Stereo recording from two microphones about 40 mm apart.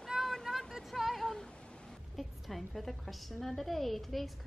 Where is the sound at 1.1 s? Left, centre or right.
Centre.